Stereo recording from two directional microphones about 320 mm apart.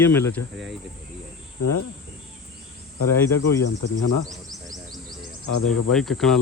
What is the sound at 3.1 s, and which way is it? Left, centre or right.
Speech, centre.